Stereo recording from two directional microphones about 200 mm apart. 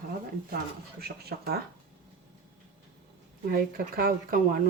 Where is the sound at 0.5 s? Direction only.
50° right (ahead or behind).